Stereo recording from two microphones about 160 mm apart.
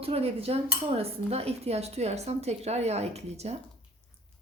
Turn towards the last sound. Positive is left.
turn(degrees=-40)  # may be behind; listen again after turning